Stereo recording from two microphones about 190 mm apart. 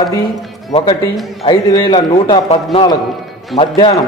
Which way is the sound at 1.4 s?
20° left (ahead or behind).